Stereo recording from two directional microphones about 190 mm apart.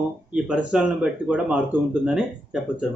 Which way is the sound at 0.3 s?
5° right (ahead or behind).